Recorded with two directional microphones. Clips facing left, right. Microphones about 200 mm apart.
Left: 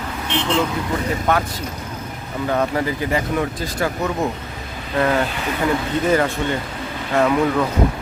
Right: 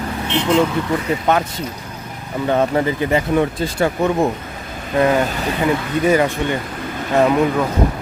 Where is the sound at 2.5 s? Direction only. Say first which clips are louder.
Right 4 dB; 25° right (ahead or behind).